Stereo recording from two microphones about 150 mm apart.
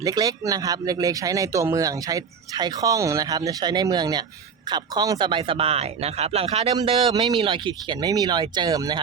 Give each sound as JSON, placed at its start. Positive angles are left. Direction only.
{"t": 0.0, "sound": "speech", "side_deg": -25}
{"t": 7.1, "sound": "speech", "side_deg": -25}